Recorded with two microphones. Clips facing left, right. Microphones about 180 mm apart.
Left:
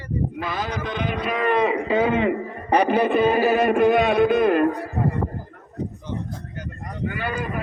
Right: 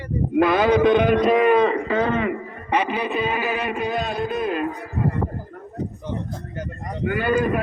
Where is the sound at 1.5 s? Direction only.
5° left (ahead or behind).